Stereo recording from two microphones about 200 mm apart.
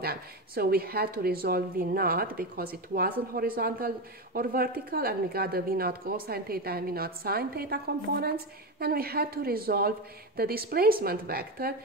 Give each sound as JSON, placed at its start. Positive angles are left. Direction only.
{"t": 0.0, "sound": "a woman's voice", "side_deg": -50}